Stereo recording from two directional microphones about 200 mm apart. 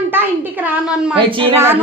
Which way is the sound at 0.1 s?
10° right (ahead or behind).